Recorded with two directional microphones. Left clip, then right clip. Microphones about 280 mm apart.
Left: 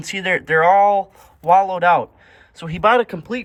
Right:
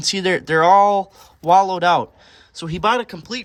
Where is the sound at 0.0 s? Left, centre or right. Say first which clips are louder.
Right 1 dB; centre.